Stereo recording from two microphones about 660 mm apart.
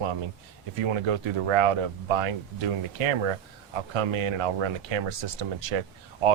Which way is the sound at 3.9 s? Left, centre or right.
Right.